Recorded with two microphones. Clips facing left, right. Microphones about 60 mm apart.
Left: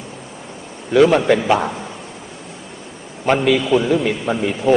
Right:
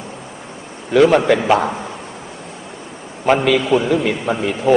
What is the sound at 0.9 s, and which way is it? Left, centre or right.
Speech, centre.